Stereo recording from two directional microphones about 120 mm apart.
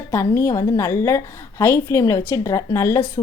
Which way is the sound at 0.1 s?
25° left (ahead or behind).